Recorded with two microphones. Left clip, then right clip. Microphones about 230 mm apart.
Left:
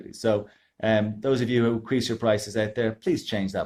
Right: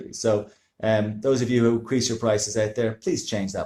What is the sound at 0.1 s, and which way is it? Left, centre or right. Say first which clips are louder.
Speech: right 2 dB; left.